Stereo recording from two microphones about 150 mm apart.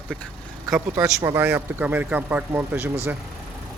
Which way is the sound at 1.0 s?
20° right (ahead or behind).